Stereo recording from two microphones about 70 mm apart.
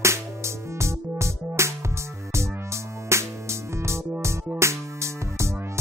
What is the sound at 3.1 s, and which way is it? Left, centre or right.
Music, right.